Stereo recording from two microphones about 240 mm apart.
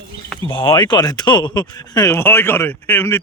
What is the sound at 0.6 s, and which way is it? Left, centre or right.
Speech, centre.